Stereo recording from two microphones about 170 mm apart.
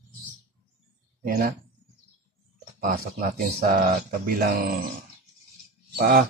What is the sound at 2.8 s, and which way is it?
Speech, 60° right (ahead or behind).